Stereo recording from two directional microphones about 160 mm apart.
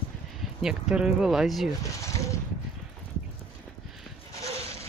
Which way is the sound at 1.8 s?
20° left (ahead or behind).